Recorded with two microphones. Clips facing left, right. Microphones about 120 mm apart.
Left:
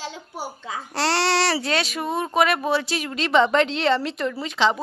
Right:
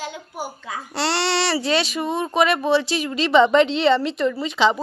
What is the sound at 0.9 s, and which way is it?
Speech, centre (ahead or behind).